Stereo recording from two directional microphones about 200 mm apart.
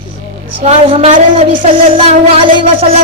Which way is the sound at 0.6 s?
30° right (ahead or behind).